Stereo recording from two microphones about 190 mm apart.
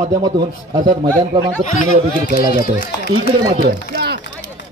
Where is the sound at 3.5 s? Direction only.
60° right (ahead or behind).